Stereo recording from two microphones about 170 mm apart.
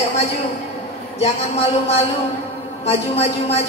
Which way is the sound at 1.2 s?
40° left (ahead or behind).